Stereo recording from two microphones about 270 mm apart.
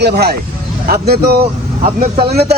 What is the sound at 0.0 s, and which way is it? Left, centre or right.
Speech, right.